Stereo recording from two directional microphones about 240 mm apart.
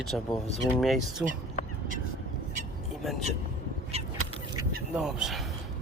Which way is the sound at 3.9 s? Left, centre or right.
Right.